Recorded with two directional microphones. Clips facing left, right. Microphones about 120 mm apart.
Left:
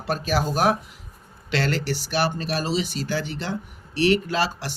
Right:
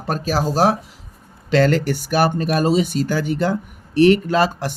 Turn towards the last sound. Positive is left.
turn(degrees=-45)  # may be behind; listen again after turning